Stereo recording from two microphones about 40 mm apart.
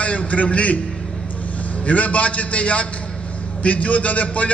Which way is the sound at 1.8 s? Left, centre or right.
Left.